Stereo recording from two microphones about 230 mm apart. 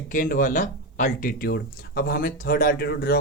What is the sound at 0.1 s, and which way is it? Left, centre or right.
Speech, left.